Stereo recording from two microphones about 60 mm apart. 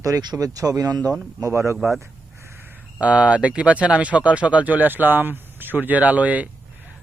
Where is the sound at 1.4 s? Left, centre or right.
Right.